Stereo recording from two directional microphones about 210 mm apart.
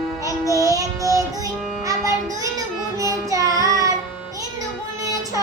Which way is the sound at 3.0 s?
15° right (ahead or behind).